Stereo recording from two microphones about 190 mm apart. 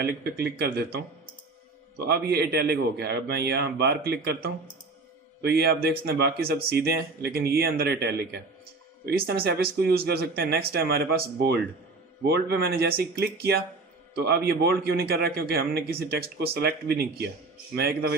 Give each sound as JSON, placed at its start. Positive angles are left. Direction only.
{"t": 0.0, "sound": "speech", "side_deg": -60}
{"t": 2.0, "sound": "speech", "side_deg": -55}